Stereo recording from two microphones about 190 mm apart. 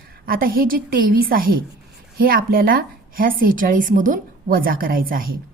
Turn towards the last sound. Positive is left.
turn(degrees=-50)  # may be behind; listen again after turning